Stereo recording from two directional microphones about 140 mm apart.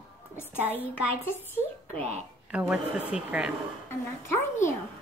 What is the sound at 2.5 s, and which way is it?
Speech, 10° right (ahead or behind).